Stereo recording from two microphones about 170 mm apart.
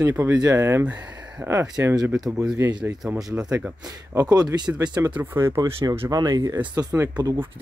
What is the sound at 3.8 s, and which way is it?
Speech, 25° right (ahead or behind).